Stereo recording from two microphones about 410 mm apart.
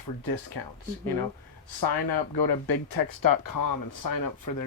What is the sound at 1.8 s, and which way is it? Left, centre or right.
Speech, left.